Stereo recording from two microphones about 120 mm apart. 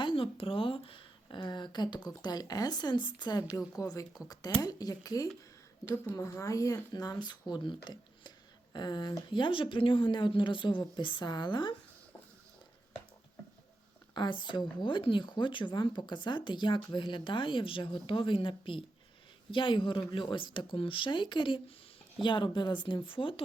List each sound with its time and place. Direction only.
0.0 s a sound: 45° left (ahead or behind)
2.0 s speech: 35° left (ahead or behind)
14.1 s speech: 40° left (ahead or behind)